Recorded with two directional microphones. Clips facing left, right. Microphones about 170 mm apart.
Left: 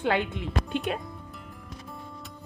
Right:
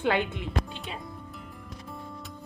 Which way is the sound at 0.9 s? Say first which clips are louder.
Left 9 dB; 60° left (ahead or behind).